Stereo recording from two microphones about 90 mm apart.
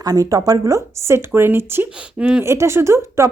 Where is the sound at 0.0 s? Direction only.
40° right (ahead or behind); by 1.9 s 25° right (ahead or behind).